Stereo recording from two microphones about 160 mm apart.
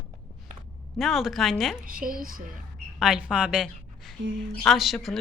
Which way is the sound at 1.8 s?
60° right (ahead or behind).